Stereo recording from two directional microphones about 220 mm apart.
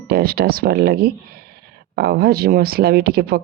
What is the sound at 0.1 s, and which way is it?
Speech, 45° right (ahead or behind).